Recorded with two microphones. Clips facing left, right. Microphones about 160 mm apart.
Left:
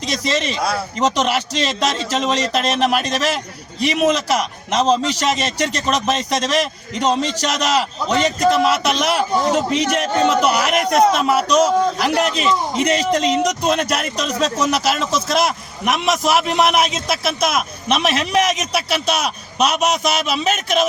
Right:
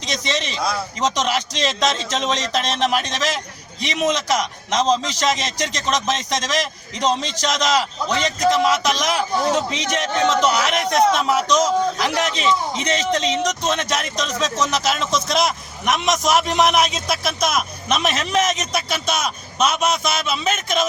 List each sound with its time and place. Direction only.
0.0 s a man's voice: 5° left (ahead or behind)
19.9 s speech: 40° left (ahead or behind)